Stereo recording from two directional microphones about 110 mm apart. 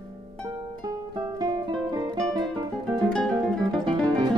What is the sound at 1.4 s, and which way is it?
Music, 40° right (ahead or behind).